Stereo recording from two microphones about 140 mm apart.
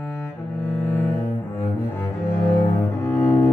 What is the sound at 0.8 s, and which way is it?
Cello, 20° left (ahead or behind).